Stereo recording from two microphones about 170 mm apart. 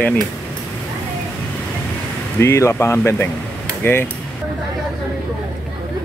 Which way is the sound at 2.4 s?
15° left (ahead or behind).